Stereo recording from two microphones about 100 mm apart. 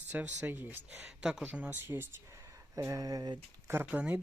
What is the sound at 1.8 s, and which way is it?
Speech, 20° right (ahead or behind).